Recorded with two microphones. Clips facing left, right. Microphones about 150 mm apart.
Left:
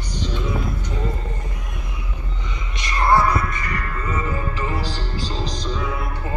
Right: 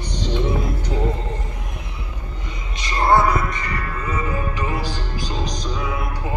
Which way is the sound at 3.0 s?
20° right (ahead or behind).